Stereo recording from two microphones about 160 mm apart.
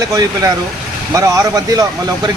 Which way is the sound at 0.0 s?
20° right (ahead or behind).